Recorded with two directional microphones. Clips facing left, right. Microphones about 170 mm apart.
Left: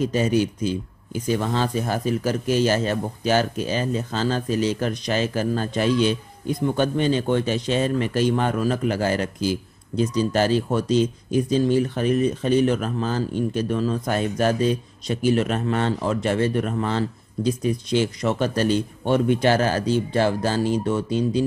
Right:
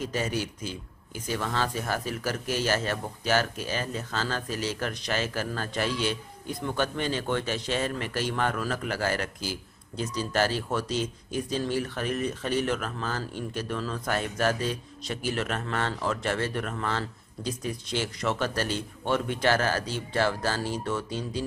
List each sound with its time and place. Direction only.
0.0 s speech: 20° left (ahead or behind)